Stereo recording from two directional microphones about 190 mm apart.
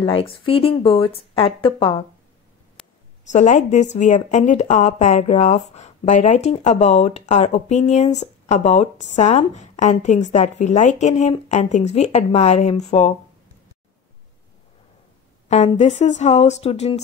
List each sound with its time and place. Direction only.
0.0 s speech: 30° left (ahead or behind)
3.3 s speech: 40° left (ahead or behind)
15.4 s speech: 35° left (ahead or behind)